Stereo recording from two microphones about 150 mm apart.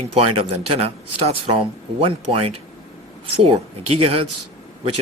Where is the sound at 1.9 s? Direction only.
40° right (ahead or behind).